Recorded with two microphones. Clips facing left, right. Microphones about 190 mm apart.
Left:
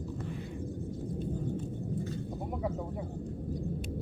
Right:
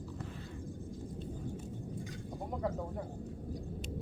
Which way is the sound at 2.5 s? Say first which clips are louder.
Even; 5° left (ahead or behind).